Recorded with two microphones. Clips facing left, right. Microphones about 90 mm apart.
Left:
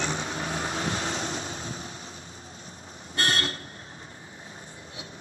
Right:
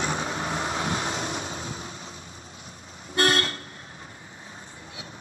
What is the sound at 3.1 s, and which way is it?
Toot, 35° right (ahead or behind).